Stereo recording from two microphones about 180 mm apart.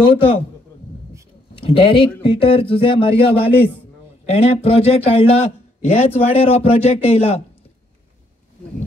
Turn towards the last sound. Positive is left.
turn(degrees=35)  # may be behind; listen again after turning